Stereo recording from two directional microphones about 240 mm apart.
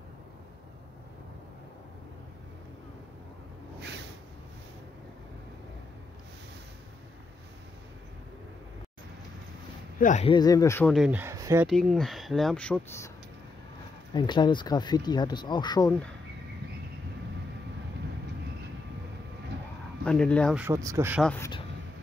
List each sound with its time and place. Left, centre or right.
9.9 s speech: left
10.3 s speech: centre
11.7 s speech: centre
14.1 s speech: centre
20.1 s speech: centre
20.6 s speech: centre
21.2 s speech: centre